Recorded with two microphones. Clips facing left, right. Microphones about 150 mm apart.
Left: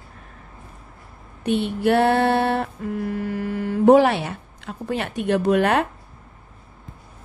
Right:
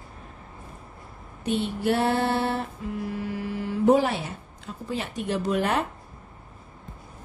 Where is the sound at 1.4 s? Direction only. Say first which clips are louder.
Left 5 dB; 65° left (ahead or behind).